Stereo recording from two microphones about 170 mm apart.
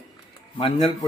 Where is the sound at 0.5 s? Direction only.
30° left (ahead or behind).